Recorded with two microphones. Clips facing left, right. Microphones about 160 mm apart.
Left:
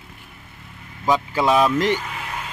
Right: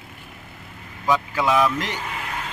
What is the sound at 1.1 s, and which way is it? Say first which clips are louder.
Speech: left 2 dB; 25° left (ahead or behind).